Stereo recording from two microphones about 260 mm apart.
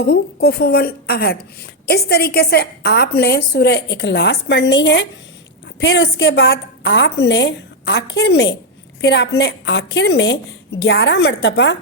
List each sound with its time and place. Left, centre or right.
0.0 s a woman's voice: left